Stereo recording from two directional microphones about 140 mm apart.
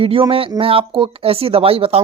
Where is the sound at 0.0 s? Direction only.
40° right (ahead or behind).